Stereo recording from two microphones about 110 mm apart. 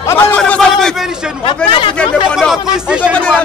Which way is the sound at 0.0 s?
25° left (ahead or behind).